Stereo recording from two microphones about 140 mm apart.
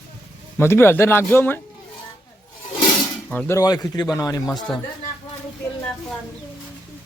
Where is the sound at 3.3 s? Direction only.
10° left (ahead or behind).